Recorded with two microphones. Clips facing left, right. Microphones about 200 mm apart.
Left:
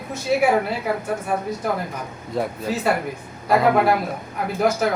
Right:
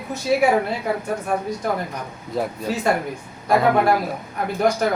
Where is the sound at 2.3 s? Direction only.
Centre (ahead or behind).